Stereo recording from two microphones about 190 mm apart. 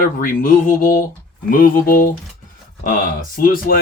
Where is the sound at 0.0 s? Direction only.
45° left (ahead or behind).